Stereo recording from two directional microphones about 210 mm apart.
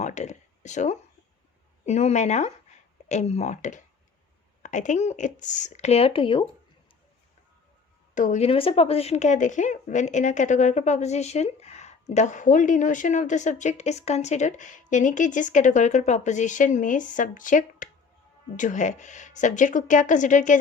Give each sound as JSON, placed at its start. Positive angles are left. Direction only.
{"t": 0.0, "sound": "a sound", "side_deg": 35}
{"t": 1.8, "sound": "speech", "side_deg": 30}
{"t": 8.1, "sound": "speech", "side_deg": 35}